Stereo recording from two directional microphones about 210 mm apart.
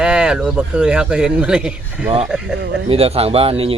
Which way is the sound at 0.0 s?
5° right (ahead or behind).